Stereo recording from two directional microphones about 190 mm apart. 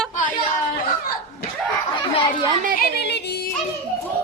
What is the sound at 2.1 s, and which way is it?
Chatter, 25° left (ahead or behind).